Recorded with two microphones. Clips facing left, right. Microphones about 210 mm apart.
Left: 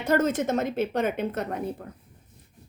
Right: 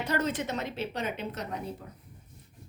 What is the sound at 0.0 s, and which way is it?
A woman's voice, 45° left (ahead or behind).